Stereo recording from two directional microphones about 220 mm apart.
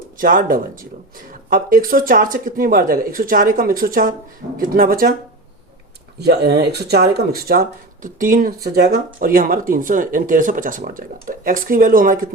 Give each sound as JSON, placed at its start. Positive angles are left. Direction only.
{"t": 0.2, "sound": "speech", "side_deg": -40}
{"t": 6.1, "sound": "speech", "side_deg": -45}